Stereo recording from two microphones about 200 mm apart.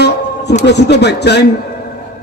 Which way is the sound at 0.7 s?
60° left (ahead or behind).